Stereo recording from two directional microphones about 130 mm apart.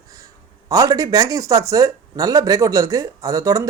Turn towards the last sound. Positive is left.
turn(degrees=-25)  # may be behind; listen again after turning